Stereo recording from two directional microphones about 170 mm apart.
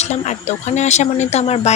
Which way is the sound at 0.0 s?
40° left (ahead or behind).